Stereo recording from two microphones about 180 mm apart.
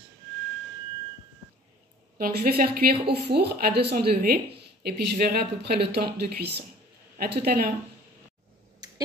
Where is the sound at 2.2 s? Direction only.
55° right (ahead or behind).